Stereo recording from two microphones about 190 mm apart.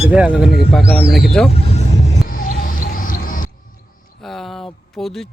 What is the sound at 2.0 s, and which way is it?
Music, 45° left (ahead or behind).